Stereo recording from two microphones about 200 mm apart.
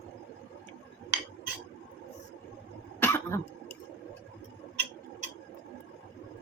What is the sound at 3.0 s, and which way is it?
Cough, 10° left (ahead or behind).